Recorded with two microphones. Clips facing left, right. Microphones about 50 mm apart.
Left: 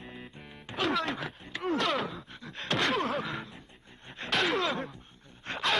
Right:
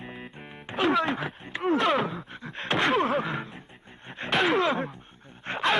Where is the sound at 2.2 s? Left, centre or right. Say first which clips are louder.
Right 5 dB; right.